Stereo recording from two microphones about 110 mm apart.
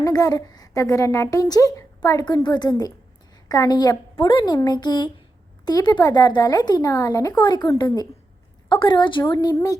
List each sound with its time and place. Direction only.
0.0 s a woman's voice: 35° left (ahead or behind)
7.3 s a woman's voice: 40° left (ahead or behind)
9.2 s a woman's voice: 35° left (ahead or behind)